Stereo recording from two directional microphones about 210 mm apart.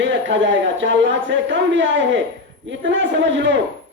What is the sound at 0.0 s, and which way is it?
Speech, 60° right (ahead or behind).